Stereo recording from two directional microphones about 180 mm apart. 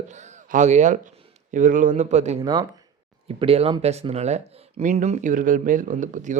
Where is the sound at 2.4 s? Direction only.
20° right (ahead or behind); by 6.3 s 45° right (ahead or behind).